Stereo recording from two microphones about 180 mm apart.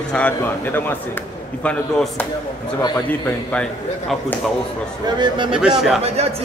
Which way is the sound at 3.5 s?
5° left (ahead or behind).